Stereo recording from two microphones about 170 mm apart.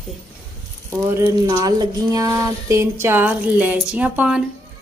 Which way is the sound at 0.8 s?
15° right (ahead or behind).